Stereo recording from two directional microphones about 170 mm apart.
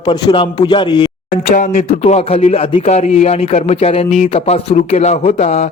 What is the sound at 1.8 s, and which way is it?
Speech, 35° left (ahead or behind).